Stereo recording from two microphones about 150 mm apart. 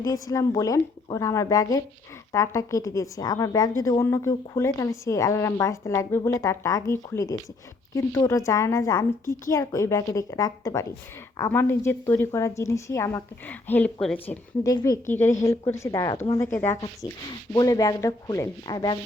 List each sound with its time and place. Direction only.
0.0 s a woman's voice: 25° left (ahead or behind); by 14.3 s 5° left (ahead or behind)
14.6 s a woman's voice: 25° left (ahead or behind)